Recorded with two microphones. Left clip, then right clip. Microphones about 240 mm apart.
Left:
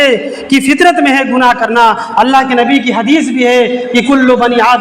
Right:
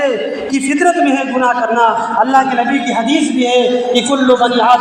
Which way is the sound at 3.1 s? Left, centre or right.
Left.